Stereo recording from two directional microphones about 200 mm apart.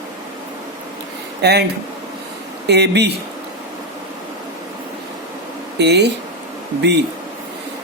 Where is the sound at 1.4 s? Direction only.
55° right (ahead or behind).